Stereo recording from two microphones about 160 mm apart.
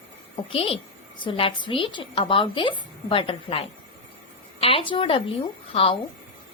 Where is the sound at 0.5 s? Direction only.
35° left (ahead or behind).